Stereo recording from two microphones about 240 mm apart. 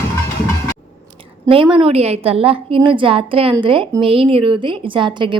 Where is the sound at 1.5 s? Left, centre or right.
Right.